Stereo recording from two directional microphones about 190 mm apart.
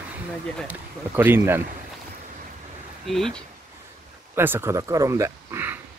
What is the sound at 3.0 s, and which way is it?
Speech, centre (ahead or behind).